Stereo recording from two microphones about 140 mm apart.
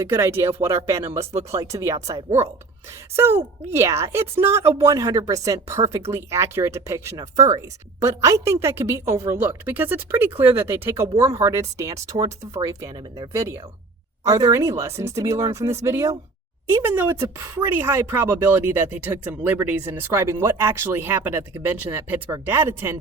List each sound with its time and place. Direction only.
0.0 s speech: 20° right (ahead or behind)
3.2 s speech: 15° right (ahead or behind)